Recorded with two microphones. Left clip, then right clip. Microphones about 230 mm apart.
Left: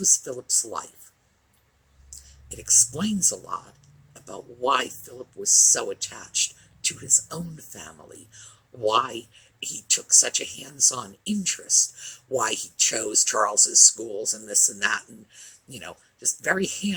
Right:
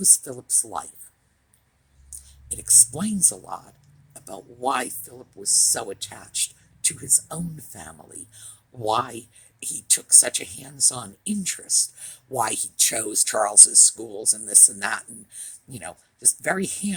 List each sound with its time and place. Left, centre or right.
0.3 s speech: right
2.5 s speech: right